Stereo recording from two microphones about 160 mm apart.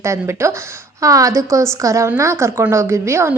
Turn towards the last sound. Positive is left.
turn(degrees=-15)  # may be behind; listen again after turning